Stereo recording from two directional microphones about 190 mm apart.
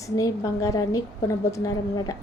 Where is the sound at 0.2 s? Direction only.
15° left (ahead or behind).